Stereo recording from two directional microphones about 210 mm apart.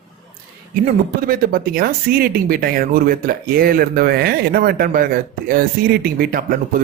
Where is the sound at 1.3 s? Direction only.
45° right (ahead or behind).